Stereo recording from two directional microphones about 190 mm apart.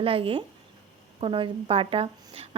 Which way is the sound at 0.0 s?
30° right (ahead or behind).